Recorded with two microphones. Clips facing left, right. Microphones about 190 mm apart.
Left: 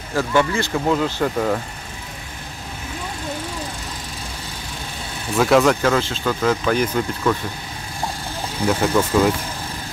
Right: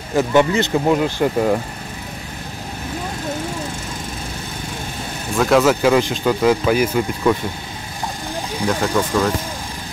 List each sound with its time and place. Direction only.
0.1 s speech: 20° right (ahead or behind)
5.4 s speech: centre (ahead or behind)
8.6 s speech: 5° left (ahead or behind)